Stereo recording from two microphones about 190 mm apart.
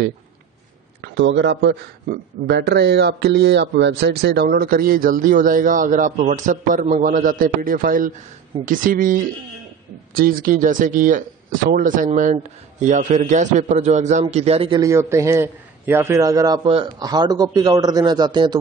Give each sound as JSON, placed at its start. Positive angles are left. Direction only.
{"t": 1.0, "sound": "a man's voice", "side_deg": -70}
{"t": 2.0, "sound": "speech", "side_deg": -55}
{"t": 14.8, "sound": "a man's voice", "side_deg": -15}